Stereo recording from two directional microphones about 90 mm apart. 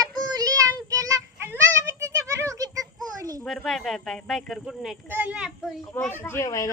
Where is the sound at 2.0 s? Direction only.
35° right (ahead or behind).